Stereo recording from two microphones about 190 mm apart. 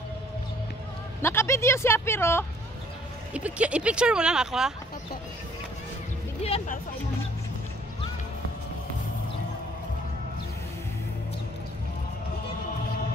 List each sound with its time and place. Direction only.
1.2 s speech: 15° left (ahead or behind)
3.3 s speech: 5° right (ahead or behind)
6.4 s speech: 35° left (ahead or behind)